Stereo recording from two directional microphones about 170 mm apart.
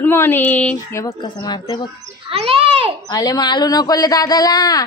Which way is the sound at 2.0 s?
35° right (ahead or behind).